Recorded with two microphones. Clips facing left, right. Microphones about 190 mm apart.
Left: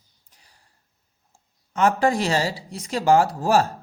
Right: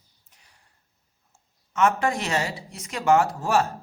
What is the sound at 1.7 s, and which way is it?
Speech, 35° left (ahead or behind).